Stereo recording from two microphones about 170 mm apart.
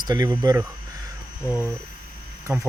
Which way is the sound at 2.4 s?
15° right (ahead or behind).